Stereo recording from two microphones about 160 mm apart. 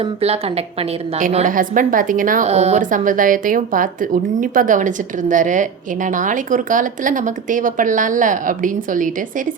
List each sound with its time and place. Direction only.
0.0 s a woman's voice: 40° right (ahead or behind)
1.5 s a woman's voice: 55° right (ahead or behind)